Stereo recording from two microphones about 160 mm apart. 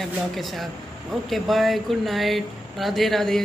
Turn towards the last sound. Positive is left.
turn(degrees=0)  # may be behind; listen again after turning